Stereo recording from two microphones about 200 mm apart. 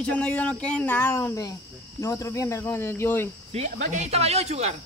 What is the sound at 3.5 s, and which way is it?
Speech, 35° right (ahead or behind).